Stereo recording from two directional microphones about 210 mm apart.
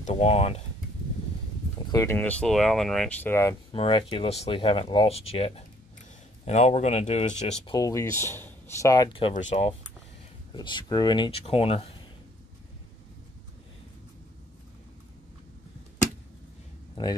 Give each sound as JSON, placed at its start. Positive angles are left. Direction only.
{"t": 0.0, "sound": "speech", "side_deg": 30}
{"t": 1.9, "sound": "speech", "side_deg": 15}
{"t": 3.7, "sound": "speech", "side_deg": 25}
{"t": 7.7, "sound": "speech", "side_deg": 15}
{"t": 10.5, "sound": "speech", "side_deg": 20}
{"t": 16.9, "sound": "speech", "side_deg": 20}